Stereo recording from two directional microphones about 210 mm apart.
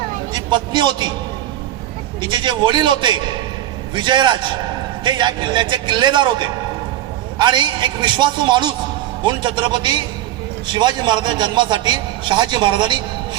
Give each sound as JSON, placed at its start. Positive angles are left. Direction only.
{"t": 0.3, "sound": "speech", "side_deg": -20}
{"t": 2.2, "sound": "a man's voice", "side_deg": -20}